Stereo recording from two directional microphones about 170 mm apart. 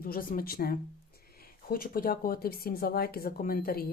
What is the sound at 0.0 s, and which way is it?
Speech, 60° left (ahead or behind).